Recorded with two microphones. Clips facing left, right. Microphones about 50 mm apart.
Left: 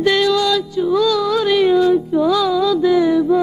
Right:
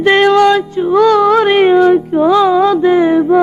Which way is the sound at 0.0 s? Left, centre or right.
Right.